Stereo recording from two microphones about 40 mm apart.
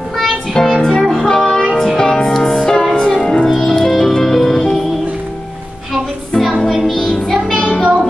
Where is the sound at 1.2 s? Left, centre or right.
Centre.